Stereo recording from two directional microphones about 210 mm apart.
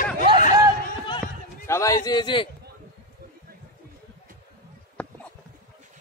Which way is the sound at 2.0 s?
20° left (ahead or behind).